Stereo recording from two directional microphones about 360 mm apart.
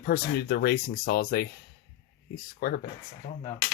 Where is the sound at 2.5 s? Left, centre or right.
Left.